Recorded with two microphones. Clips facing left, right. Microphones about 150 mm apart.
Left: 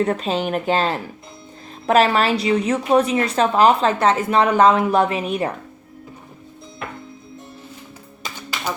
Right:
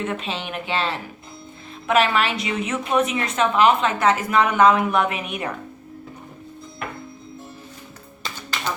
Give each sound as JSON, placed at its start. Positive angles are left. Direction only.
{"t": 0.0, "sound": "a woman's voice", "side_deg": 40}